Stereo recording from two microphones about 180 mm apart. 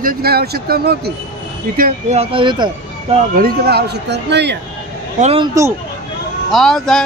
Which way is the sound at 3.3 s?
60° right (ahead or behind).